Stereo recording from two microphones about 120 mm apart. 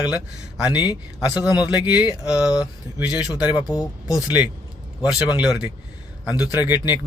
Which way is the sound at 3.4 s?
35° left (ahead or behind).